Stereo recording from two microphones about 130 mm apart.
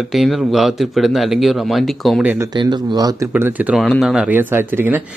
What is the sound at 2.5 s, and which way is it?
Speech, 35° right (ahead or behind).